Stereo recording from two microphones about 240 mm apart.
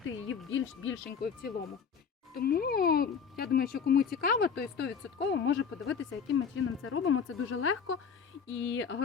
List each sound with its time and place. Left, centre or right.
0.3 s speech: left
1.2 s speech: left